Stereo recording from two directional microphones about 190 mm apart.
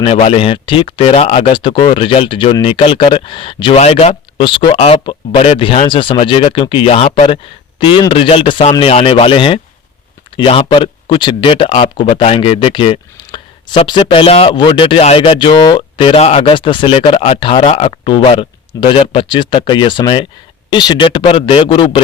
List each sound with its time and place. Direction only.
0.0 s speech: 30° left (ahead or behind)